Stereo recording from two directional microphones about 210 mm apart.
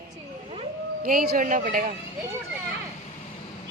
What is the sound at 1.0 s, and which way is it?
Speech, 45° right (ahead or behind).